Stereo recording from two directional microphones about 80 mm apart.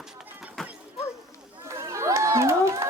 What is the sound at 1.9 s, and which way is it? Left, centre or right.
Crowd, right.